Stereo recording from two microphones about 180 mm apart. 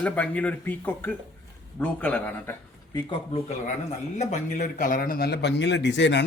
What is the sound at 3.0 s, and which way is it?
A man's voice, 30° left (ahead or behind).